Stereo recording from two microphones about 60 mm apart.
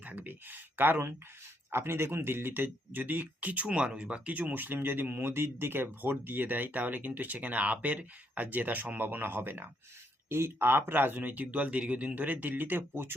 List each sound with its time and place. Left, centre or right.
0.0 s speech: right